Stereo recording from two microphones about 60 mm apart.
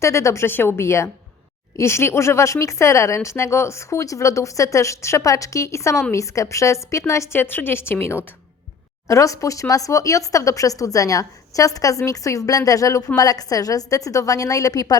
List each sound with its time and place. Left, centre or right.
0.0 s a woman's voice: left
0.4 s a woman's voice: left
7.3 s speech: left
9.0 s speech: left
13.1 s a woman's voice: left